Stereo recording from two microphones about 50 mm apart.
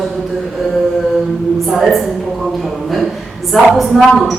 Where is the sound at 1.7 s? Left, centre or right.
Centre.